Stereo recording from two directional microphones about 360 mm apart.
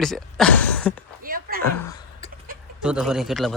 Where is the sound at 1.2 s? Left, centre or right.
Right.